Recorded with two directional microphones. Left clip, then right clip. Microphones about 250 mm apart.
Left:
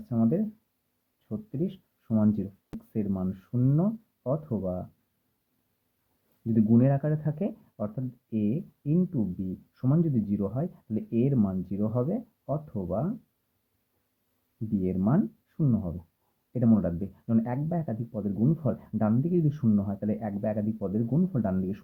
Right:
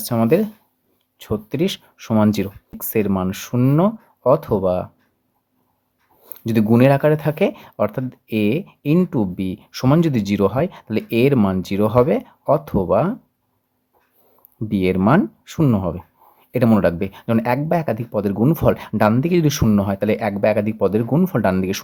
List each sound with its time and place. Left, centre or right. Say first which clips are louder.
0.0 s speech: right 12 dB; right
1.5 s speech: right 11 dB; right
6.5 s speech: right 11 dB; right
14.8 s speech: right 13 dB; right